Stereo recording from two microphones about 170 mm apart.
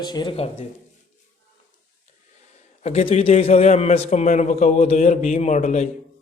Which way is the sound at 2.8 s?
35° left (ahead or behind).